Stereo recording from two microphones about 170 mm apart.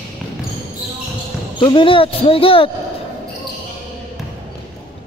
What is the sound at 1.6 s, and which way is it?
Speech, 25° left (ahead or behind).